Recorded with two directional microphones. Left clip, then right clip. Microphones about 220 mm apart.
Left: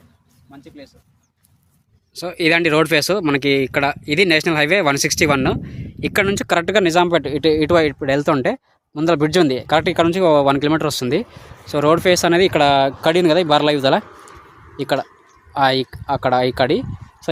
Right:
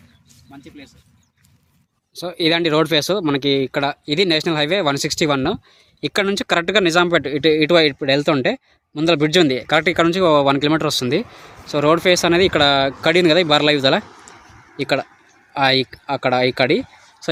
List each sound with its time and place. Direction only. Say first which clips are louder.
2.1 s speech: left 2 dB; centre (ahead or behind)
14.0 s a sound: left 1 dB; 40° right (ahead or behind)
14.8 s speech: even; centre (ahead or behind)